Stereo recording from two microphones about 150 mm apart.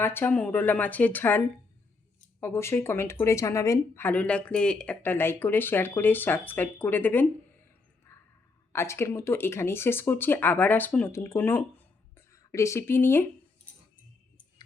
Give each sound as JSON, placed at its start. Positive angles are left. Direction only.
{"t": 0.0, "sound": "speech", "side_deg": 15}
{"t": 8.1, "sound": "a sound", "side_deg": 15}
{"t": 8.7, "sound": "speech", "side_deg": 15}